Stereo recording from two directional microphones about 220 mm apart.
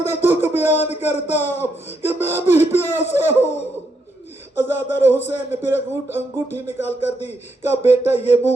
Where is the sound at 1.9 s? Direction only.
10° right (ahead or behind).